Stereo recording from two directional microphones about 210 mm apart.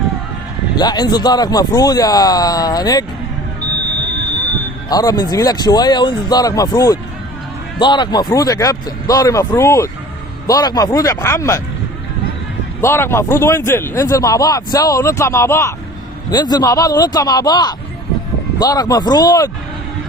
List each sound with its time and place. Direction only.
0.8 s speech: 20° left (ahead or behind)
4.9 s speech: 20° left (ahead or behind)
12.8 s speech: 10° left (ahead or behind)